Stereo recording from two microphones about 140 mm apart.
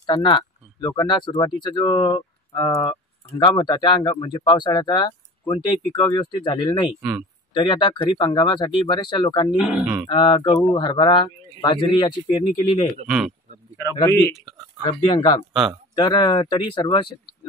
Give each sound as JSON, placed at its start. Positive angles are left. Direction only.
{"t": 0.0, "sound": "speech", "side_deg": 35}
{"t": 7.0, "sound": "speech", "side_deg": -5}
{"t": 7.5, "sound": "speech", "side_deg": 35}
{"t": 9.6, "sound": "speech", "side_deg": -5}
{"t": 10.0, "sound": "speech", "side_deg": 35}
{"t": 13.0, "sound": "speech", "side_deg": -5}
{"t": 14.8, "sound": "speech", "side_deg": 35}